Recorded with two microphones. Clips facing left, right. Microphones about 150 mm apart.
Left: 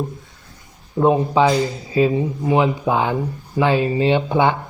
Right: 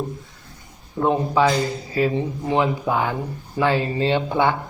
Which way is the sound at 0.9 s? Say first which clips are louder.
Left 4 dB; 20° left (ahead or behind).